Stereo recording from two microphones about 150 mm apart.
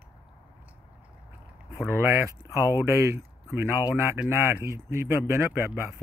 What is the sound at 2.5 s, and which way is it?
Speech, 20° right (ahead or behind).